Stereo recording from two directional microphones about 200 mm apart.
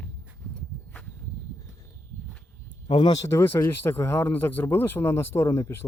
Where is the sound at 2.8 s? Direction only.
25° left (ahead or behind).